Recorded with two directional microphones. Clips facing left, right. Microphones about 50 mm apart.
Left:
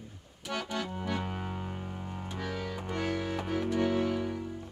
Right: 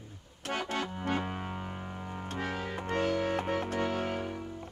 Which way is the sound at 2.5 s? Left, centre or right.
Right.